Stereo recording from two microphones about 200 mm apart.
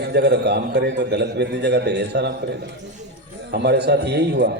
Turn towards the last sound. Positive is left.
turn(degrees=-60)  # may be behind; listen again after turning